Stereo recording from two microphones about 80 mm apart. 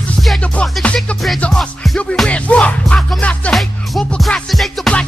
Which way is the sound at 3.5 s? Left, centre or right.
Centre.